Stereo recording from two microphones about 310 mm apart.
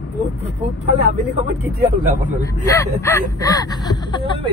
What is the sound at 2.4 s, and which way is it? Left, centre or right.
Speech, centre.